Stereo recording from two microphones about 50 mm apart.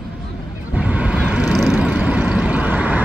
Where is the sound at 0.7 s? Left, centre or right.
Right.